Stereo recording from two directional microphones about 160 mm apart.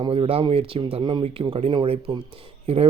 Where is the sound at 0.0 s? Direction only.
35° right (ahead or behind).